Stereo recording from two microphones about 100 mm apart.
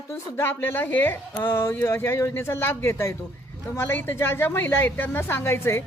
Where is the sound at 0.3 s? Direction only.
20° left (ahead or behind).